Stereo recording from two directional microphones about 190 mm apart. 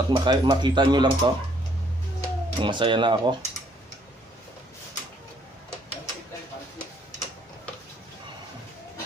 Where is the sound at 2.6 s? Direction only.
25° right (ahead or behind).